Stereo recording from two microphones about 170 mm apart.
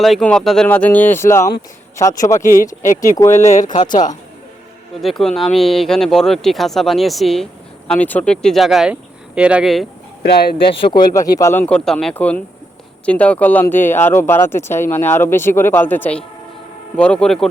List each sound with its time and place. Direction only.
0.0 s a man's voice: 5° left (ahead or behind); by 2.4 s 20° left (ahead or behind)
2.4 s speech: 50° left (ahead or behind)
3.0 s speech: 20° left (ahead or behind)
3.3 s speech: 45° left (ahead or behind)
4.9 s speech: centre (ahead or behind)
10.2 s speech: 70° left (ahead or behind)
10.7 s a man's voice: 30° left (ahead or behind)
11.1 s speech: 20° left (ahead or behind); by 17.5 s 5° left (ahead or behind)